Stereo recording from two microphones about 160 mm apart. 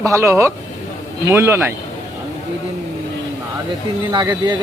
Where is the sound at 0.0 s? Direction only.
20° right (ahead or behind).